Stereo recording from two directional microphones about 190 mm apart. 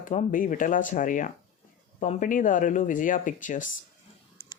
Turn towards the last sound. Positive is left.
turn(degrees=45)  # may be behind; listen again after turning